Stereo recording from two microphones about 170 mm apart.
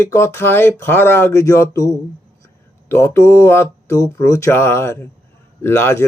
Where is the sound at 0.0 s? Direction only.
15° left (ahead or behind).